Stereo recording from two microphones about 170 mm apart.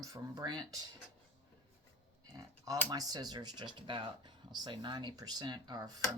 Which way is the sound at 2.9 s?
25° right (ahead or behind).